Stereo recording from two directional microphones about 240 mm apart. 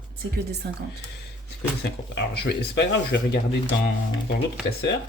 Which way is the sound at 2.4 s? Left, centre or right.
Left.